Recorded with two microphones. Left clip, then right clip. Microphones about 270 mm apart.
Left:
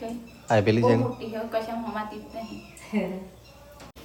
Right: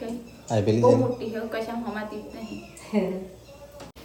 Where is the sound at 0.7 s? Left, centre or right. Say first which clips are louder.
Right 3 dB; centre.